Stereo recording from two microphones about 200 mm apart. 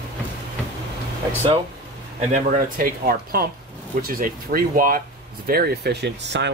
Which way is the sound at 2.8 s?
45° right (ahead or behind).